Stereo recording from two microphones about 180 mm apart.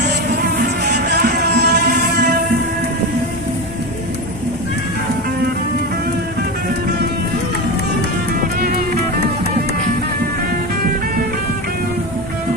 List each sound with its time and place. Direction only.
0.9 s music: 65° right (ahead or behind)